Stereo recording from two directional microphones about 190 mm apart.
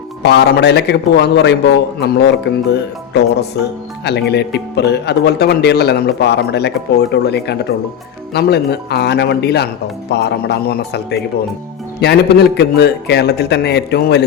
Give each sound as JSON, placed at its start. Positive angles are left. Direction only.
{"t": 0.2, "sound": "speech", "side_deg": 60}